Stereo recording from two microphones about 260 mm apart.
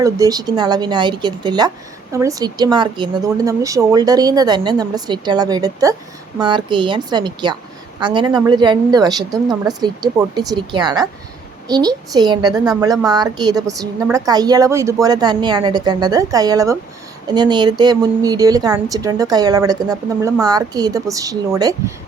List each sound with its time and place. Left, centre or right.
0.0 s a woman's voice: centre